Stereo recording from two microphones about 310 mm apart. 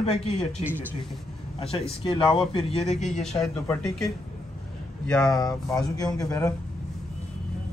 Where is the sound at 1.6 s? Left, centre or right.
Centre.